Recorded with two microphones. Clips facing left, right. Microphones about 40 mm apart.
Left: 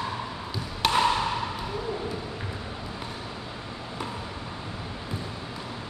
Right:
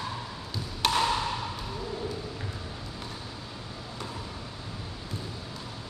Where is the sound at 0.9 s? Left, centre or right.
Centre.